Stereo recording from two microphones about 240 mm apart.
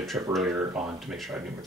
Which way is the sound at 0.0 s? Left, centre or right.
Centre.